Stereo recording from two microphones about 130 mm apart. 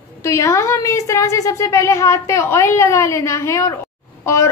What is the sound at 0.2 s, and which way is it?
A woman's voice, 25° left (ahead or behind).